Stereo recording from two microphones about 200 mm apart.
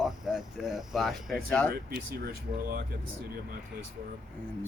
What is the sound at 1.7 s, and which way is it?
Speech, 50° right (ahead or behind).